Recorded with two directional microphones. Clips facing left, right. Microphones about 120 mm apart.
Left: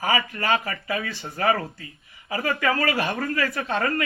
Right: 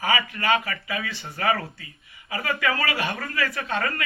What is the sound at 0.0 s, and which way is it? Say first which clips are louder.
A man's voice: even; 35° left (ahead or behind).